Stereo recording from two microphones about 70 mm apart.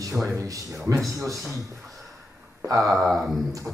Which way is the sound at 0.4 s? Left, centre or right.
Right.